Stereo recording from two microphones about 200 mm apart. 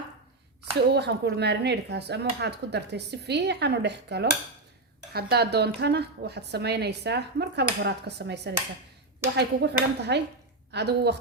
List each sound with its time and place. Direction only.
0.9 s speech: 55° right (ahead or behind)